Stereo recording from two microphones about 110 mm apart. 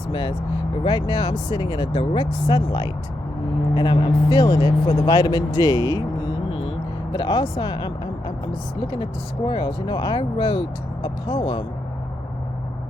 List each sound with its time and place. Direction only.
0.1 s speech: 50° left (ahead or behind)
6.5 s vehicle: 55° left (ahead or behind)
8.8 s speech: 45° left (ahead or behind)